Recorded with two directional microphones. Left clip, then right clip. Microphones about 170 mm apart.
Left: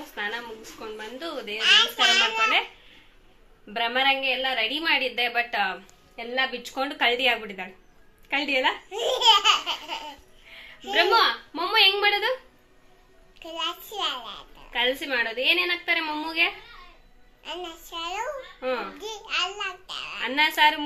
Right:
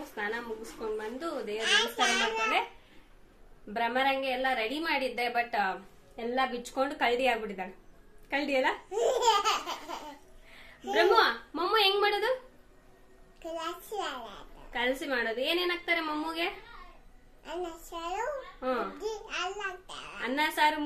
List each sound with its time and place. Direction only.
0.1 s a sound: centre (ahead or behind)
1.6 s laughter: 10° right (ahead or behind)
3.7 s a woman's voice: centre (ahead or behind)
6.1 s laughter: 10° right (ahead or behind)
6.7 s a woman's voice: centre (ahead or behind)
8.9 s laughter: 15° right (ahead or behind)
10.9 s a woman's voice: centre (ahead or behind)
13.4 s laughter: 15° right (ahead or behind)
14.7 s a woman's voice: centre (ahead or behind)
17.4 s laughter: 15° right (ahead or behind)
18.6 s a child's voice: centre (ahead or behind)
18.9 s laughter: 15° right (ahead or behind)
20.2 s a woman's voice: centre (ahead or behind)